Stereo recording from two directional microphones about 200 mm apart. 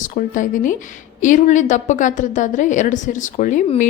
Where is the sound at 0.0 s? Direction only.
40° left (ahead or behind).